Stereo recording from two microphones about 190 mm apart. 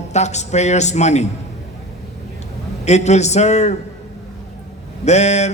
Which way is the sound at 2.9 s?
35° left (ahead or behind).